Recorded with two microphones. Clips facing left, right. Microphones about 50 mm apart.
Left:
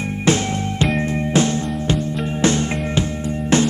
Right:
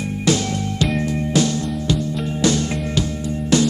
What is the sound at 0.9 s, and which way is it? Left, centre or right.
Music, left.